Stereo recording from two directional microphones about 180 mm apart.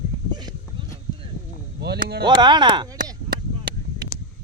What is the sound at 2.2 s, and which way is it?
Speech, 25° right (ahead or behind).